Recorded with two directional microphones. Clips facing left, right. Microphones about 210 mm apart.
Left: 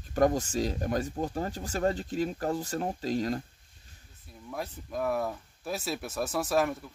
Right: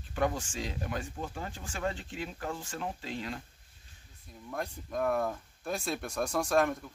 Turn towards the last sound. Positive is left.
turn(degrees=5)  # may be behind; listen again after turning